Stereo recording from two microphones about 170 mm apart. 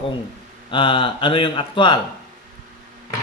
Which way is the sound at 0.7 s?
30° left (ahead or behind).